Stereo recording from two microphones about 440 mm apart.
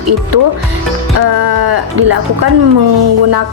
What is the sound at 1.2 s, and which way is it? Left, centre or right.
Speech, right.